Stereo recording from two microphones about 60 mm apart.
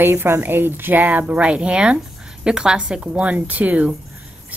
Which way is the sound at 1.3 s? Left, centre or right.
Centre.